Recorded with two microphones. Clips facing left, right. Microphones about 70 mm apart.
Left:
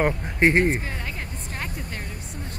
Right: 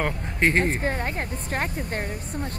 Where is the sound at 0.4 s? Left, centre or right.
Centre.